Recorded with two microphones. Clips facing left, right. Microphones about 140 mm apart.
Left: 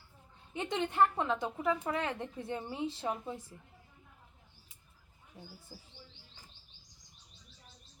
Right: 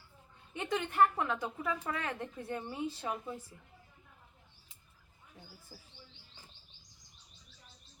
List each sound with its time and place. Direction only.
0.5 s speech: 25° left (ahead or behind)